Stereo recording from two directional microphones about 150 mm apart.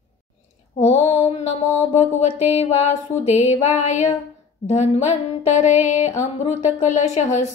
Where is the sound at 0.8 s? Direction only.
45° left (ahead or behind).